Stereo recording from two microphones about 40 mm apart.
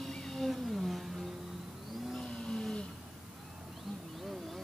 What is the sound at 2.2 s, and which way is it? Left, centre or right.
Vehicle, centre.